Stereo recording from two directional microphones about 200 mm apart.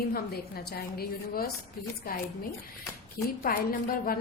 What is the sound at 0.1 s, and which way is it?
A woman's voice, 50° left (ahead or behind).